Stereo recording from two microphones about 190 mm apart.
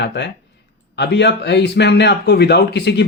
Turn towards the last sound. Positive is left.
turn(degrees=60)  # may be behind; listen again after turning